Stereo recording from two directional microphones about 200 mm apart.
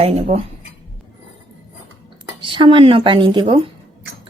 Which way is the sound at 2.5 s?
25° right (ahead or behind).